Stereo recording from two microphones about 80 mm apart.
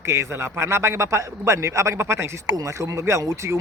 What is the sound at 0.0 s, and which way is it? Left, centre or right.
A man's voice, right.